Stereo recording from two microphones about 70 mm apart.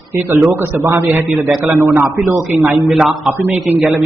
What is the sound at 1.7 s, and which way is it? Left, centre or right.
Speech, right.